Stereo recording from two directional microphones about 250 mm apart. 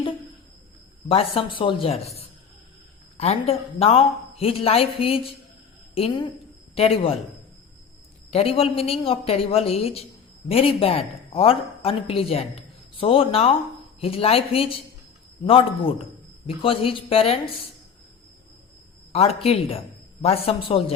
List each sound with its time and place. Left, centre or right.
1.0 s a woman's voice: left
8.3 s a woman's voice: left
19.1 s a woman's voice: left